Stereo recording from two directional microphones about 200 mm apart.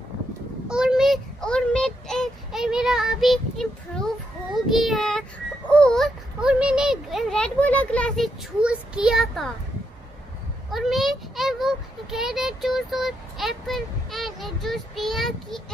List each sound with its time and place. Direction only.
0.7 s child singing: 5° right (ahead or behind)
5.7 s a child's voice: 5° left (ahead or behind)
10.7 s a child's voice: centre (ahead or behind)